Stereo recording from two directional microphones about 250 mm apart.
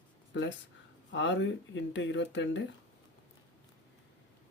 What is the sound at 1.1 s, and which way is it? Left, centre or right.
Speech, left.